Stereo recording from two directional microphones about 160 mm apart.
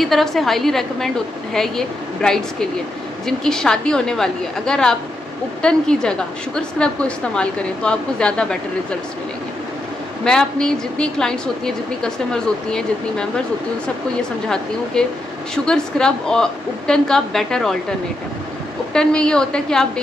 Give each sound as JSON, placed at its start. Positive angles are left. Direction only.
{"t": 0.0, "sound": "a woman's voice", "side_deg": 0}
{"t": 10.2, "sound": "a woman's voice", "side_deg": 5}
{"t": 15.0, "sound": "a woman's voice", "side_deg": 5}
{"t": 18.9, "sound": "a woman's voice", "side_deg": 5}